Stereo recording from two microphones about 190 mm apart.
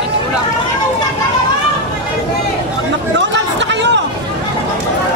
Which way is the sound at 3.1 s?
70° right (ahead or behind).